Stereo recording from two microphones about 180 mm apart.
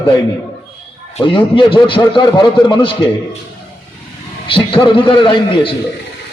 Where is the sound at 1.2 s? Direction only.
25° left (ahead or behind).